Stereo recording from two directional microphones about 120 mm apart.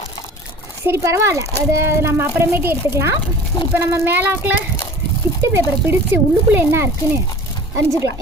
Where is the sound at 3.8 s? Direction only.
20° right (ahead or behind).